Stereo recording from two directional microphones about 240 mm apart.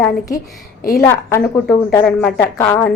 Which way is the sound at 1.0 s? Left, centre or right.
Centre.